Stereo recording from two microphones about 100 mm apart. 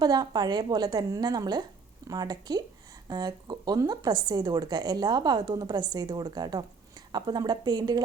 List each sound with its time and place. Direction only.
0.0 s a woman's voice: 40° right (ahead or behind)